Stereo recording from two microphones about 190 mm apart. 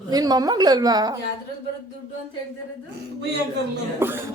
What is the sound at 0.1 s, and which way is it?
Speech, 20° right (ahead or behind).